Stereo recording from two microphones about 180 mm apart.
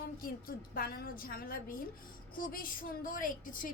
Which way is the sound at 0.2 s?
55° left (ahead or behind).